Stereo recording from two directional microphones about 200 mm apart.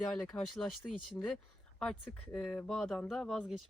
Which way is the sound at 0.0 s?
5° left (ahead or behind).